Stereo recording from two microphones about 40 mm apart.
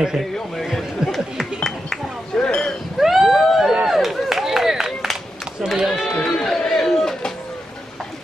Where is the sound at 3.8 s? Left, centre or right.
Centre.